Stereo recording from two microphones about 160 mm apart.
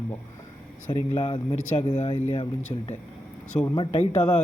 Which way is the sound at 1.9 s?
45° left (ahead or behind).